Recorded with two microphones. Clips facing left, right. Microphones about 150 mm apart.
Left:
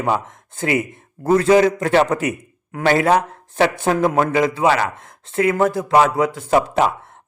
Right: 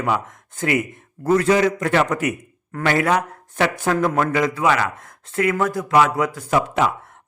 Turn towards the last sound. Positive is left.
turn(degrees=30)  # may be behind; listen again after turning